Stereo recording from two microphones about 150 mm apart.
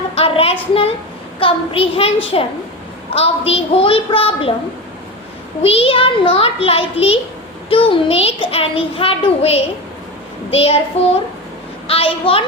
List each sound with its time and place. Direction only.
0.2 s a sound: 40° left (ahead or behind)
1.4 s a child's voice: 35° left (ahead or behind)
5.6 s a child's voice: 40° left (ahead or behind)
10.5 s child singing: 45° left (ahead or behind)
11.9 s a child's voice: 40° left (ahead or behind)